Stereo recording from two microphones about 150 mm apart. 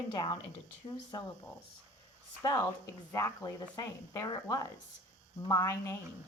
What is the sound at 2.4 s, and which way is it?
A woman's voice, 20° left (ahead or behind).